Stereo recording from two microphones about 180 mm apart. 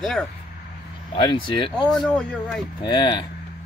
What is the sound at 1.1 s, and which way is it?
Speech, 30° left (ahead or behind).